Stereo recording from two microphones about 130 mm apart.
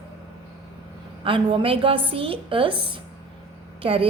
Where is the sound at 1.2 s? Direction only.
40° right (ahead or behind).